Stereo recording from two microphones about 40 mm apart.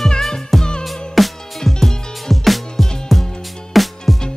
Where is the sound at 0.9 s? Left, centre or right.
Centre.